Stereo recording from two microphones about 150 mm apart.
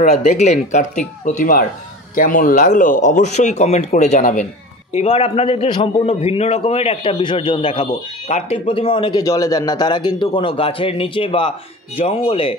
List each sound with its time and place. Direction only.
0.0 s speech: 50° left (ahead or behind)
4.9 s a man's voice: 40° left (ahead or behind)